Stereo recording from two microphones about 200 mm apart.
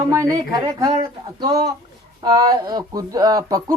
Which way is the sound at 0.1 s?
15° right (ahead or behind).